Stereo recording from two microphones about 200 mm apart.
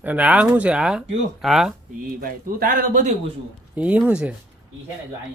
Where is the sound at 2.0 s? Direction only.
45° right (ahead or behind).